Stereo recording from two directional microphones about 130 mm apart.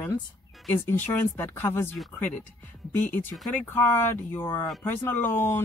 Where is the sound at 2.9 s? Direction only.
15° left (ahead or behind).